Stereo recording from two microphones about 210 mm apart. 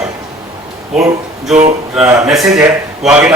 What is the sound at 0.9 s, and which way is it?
Speech, centre (ahead or behind).